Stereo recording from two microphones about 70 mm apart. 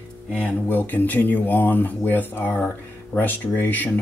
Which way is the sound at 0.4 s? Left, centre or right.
Left.